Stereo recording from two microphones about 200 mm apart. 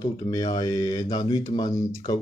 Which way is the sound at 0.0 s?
20° left (ahead or behind).